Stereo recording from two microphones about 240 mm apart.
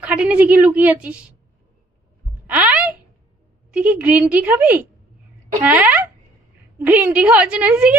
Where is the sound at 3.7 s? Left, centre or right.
Centre.